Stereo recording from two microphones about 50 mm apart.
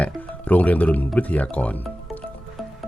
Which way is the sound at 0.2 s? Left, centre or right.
Left.